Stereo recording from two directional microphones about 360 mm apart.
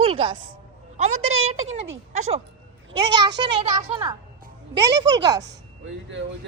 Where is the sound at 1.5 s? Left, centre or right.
Right.